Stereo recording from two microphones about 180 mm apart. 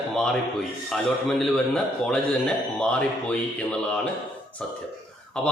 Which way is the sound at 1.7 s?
5° left (ahead or behind).